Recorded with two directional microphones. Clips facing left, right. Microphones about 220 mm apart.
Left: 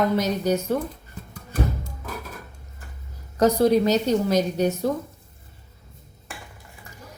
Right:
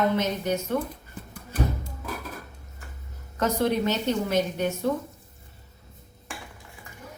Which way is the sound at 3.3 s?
35° left (ahead or behind).